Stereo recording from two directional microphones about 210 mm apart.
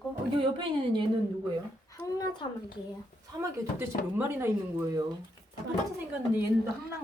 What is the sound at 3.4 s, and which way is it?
Speech, 10° right (ahead or behind).